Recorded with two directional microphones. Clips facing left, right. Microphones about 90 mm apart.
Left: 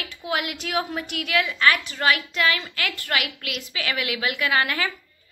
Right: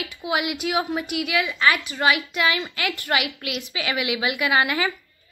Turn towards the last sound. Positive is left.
turn(degrees=-15)  # may be behind; listen again after turning